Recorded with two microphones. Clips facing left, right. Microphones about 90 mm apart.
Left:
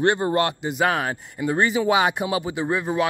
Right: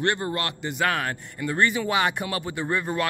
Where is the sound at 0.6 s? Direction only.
15° left (ahead or behind).